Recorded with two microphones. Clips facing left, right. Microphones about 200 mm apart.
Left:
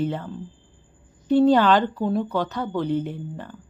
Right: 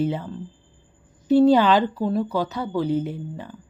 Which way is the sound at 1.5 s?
10° right (ahead or behind).